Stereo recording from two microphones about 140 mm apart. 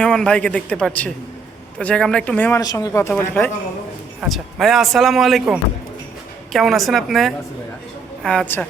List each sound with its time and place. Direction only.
0.0 s a man's voice: 5° left (ahead or behind)
2.6 s speech: 25° left (ahead or behind); by 3.5 s 10° left (ahead or behind)
4.2 s speech: 5° right (ahead or behind)